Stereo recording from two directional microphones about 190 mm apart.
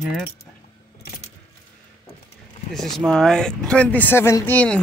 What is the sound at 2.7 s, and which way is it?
Speech, centre (ahead or behind).